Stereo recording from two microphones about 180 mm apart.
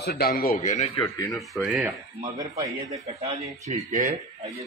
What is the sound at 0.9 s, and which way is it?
Speech, 20° left (ahead or behind).